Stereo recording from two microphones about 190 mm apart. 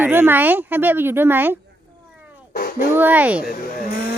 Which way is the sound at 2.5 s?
50° left (ahead or behind).